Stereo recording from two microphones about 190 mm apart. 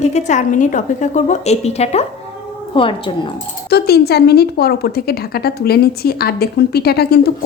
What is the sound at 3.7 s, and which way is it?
A woman's voice, 55° left (ahead or behind).